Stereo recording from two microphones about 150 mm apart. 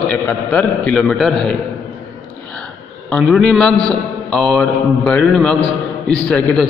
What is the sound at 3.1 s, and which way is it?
A man's voice, 5° left (ahead or behind).